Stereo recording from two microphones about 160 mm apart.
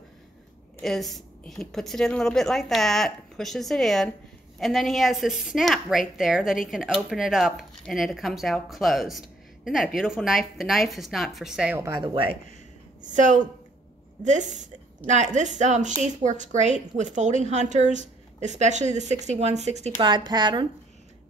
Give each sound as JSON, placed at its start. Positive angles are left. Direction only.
{"t": 0.8, "sound": "a woman's voice", "side_deg": 0}
{"t": 12.0, "sound": "speech", "side_deg": -35}
{"t": 13.0, "sound": "speech", "side_deg": -50}
{"t": 20.0, "sound": "speech", "side_deg": -30}